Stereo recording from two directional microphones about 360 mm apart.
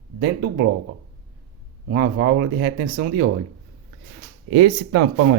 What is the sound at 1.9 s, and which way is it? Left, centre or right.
Speech, right.